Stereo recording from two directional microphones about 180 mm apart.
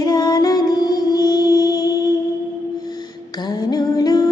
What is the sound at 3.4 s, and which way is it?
Music, 20° left (ahead or behind).